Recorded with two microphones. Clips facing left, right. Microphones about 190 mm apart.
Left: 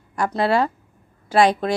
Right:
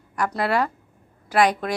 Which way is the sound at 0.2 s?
25° left (ahead or behind).